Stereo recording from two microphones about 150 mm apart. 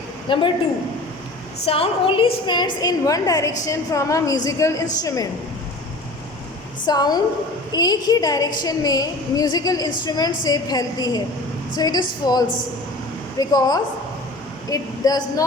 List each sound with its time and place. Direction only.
0.3 s a woman's voice: 35° left (ahead or behind)
1.6 s a woman's voice: 40° left (ahead or behind); by 5.3 s 25° left (ahead or behind)
6.8 s a woman's voice: 25° left (ahead or behind)